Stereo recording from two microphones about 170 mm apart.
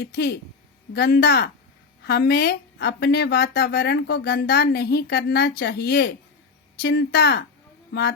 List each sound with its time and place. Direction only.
0.0 s speech: 70° left (ahead or behind)